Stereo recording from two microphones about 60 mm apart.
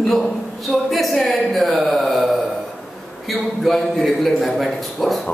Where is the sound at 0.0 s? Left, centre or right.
Centre.